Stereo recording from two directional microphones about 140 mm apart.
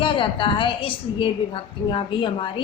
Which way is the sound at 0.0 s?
35° left (ahead or behind).